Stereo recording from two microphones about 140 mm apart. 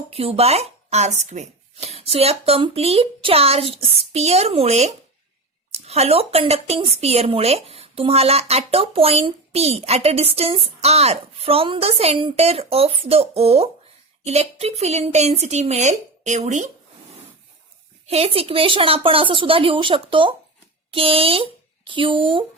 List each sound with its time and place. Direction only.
0.1 s speech: 45° right (ahead or behind)
18.1 s speech: 45° right (ahead or behind)